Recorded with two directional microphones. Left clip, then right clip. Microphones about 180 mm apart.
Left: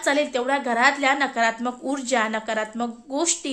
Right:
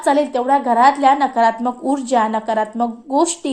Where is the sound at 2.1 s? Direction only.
25° left (ahead or behind).